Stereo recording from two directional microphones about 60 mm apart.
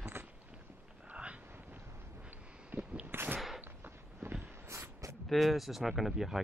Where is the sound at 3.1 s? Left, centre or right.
Right.